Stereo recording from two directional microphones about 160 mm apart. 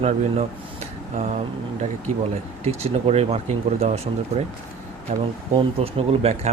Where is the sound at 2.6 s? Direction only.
40° right (ahead or behind).